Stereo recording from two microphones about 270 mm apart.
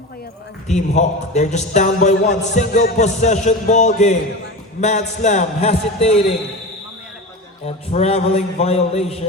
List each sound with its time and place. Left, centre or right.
0.7 s a man's voice: left
7.9 s a man's voice: left